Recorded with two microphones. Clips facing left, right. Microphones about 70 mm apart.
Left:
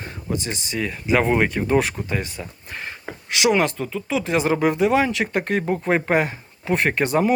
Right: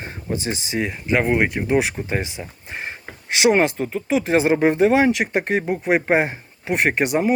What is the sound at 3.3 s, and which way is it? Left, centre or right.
Speech, right.